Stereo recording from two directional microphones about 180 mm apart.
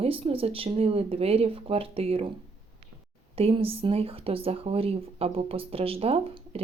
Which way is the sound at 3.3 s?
30° right (ahead or behind).